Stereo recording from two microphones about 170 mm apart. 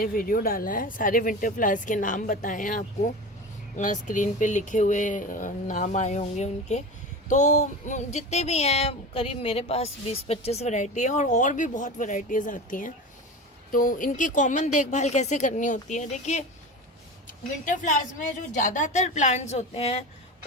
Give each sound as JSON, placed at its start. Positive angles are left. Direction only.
{"t": 0.0, "sound": "speech", "side_deg": 60}